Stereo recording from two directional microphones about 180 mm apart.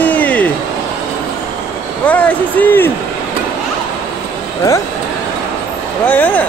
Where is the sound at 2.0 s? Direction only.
5° left (ahead or behind).